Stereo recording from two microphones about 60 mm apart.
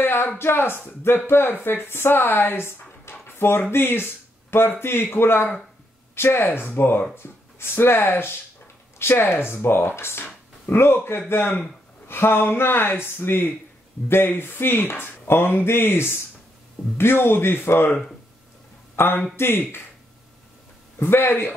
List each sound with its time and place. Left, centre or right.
0.0 s a sound: left
0.4 s speech: left
18.9 s speech: left
21.0 s speech: left